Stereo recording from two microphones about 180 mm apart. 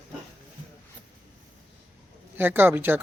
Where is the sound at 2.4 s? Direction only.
10° right (ahead or behind).